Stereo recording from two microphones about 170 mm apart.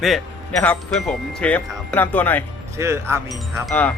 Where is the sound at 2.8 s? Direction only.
15° right (ahead or behind).